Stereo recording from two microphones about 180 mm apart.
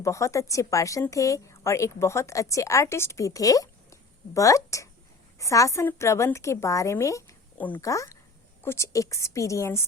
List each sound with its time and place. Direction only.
0.0 s a woman's voice: 15° left (ahead or behind)